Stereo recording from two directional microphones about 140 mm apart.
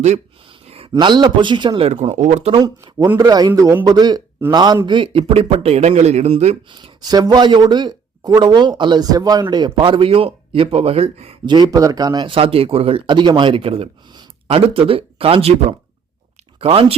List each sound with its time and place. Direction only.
0.7 s speech: 40° right (ahead or behind)
1.9 s speech: 50° right (ahead or behind)
2.6 s a man's voice: 25° right (ahead or behind); by 6.6 s 50° right (ahead or behind)
6.7 s speech: 35° right (ahead or behind)
16.6 s speech: 45° right (ahead or behind)